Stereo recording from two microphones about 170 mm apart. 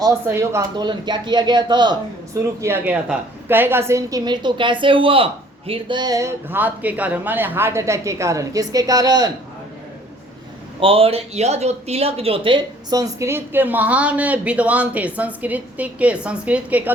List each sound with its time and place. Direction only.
0.3 s speech: 15° right (ahead or behind)
2.6 s a woman's voice: 15° right (ahead or behind)
10.8 s a woman's voice: 35° right (ahead or behind); by 16.9 s 10° right (ahead or behind)